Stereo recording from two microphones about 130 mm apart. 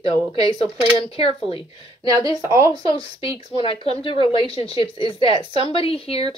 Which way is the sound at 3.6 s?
40° left (ahead or behind).